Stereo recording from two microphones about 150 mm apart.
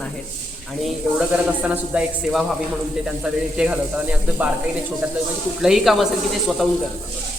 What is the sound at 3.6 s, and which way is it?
Speech, 10° right (ahead or behind).